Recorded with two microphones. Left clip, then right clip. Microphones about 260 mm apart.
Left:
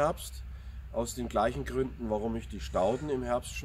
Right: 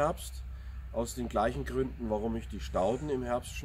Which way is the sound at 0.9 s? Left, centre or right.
Centre.